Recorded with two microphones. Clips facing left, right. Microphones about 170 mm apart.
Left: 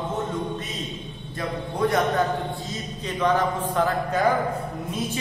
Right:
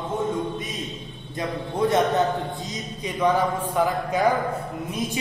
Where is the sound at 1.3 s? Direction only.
25° right (ahead or behind).